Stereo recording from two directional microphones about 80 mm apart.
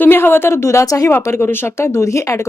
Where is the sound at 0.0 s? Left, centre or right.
Left.